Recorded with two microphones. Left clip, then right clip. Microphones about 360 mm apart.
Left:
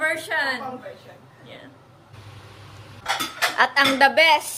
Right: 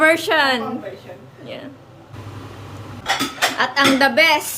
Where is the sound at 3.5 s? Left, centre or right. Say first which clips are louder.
Right 1 dB; centre.